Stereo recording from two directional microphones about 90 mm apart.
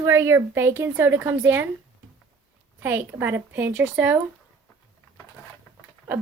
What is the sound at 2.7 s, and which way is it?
A woman's voice, 20° right (ahead or behind).